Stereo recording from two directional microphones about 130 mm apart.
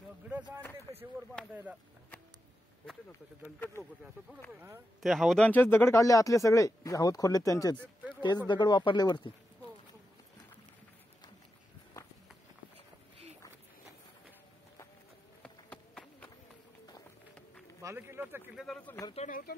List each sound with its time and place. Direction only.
0.9 s a sound: 25° right (ahead or behind)
1.5 s speech: 10° right (ahead or behind)
3.1 s speech: 15° left (ahead or behind)
5.0 s speech: centre (ahead or behind)
5.4 s speech: 15° left (ahead or behind); by 9.3 s 35° left (ahead or behind)
15.4 s run: 5° left (ahead or behind)
17.8 s speech: 20° right (ahead or behind)
18.5 s speech: centre (ahead or behind)
19.1 s speech: 75° left (ahead or behind)